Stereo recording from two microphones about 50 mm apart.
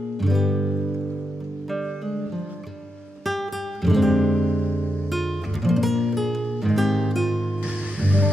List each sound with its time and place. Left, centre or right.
0.2 s music: centre
3.3 s music: centre
8.0 s music: left